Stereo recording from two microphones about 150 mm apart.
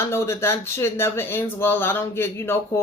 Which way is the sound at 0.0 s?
15° left (ahead or behind).